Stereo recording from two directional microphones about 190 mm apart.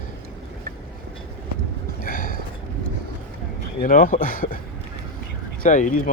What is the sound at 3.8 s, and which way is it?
Speech, 45° left (ahead or behind).